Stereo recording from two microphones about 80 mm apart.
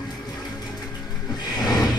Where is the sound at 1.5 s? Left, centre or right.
Left.